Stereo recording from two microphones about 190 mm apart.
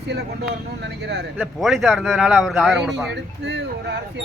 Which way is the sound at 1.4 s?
Centre (ahead or behind).